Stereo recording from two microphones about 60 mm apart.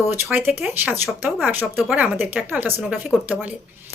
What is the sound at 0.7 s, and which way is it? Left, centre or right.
Speech, right.